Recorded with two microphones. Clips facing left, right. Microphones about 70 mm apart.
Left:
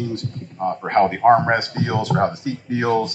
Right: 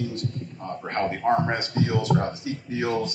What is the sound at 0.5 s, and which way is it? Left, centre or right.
Speech, left.